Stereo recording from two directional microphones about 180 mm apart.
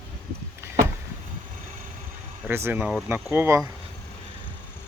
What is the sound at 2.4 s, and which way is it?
Speech, 10° right (ahead or behind).